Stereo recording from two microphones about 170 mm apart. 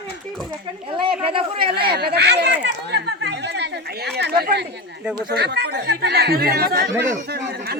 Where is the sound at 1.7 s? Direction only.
70° right (ahead or behind).